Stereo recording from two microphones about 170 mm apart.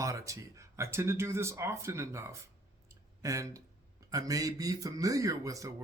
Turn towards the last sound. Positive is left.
turn(degrees=-20)  # may be behind; listen again after turning